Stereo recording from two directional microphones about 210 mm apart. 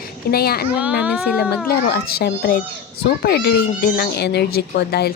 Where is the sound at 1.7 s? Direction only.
45° left (ahead or behind).